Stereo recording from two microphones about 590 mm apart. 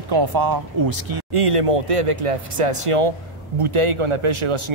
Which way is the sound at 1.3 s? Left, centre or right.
Right.